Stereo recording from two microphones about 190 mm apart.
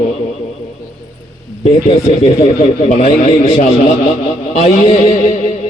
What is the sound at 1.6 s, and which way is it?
A man's voice, 35° left (ahead or behind).